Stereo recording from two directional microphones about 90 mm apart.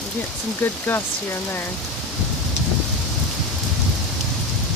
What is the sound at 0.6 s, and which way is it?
Speech, 25° left (ahead or behind).